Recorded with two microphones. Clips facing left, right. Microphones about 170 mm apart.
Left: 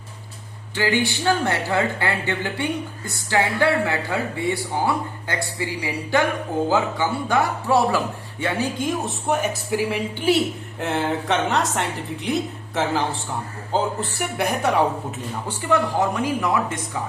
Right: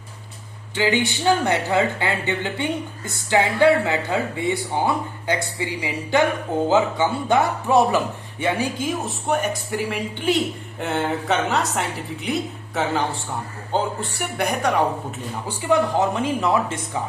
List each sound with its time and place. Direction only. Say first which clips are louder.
0.8 s speech: right 1 dB; 20° right (ahead or behind)
8.8 s a woman's voice: left 1 dB; centre (ahead or behind)
15.4 s speech: right 2 dB; 20° right (ahead or behind)